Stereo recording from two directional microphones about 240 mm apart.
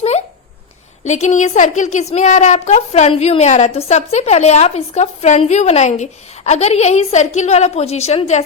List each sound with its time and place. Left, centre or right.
1.0 s a woman's voice: left